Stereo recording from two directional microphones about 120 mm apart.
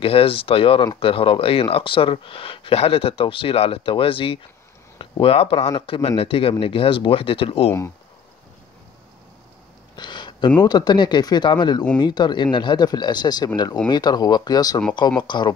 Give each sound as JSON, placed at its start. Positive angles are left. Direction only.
{"t": 0.0, "sound": "speech", "side_deg": 50}
{"t": 9.9, "sound": "a sound", "side_deg": 40}
{"t": 10.6, "sound": "speech", "side_deg": 35}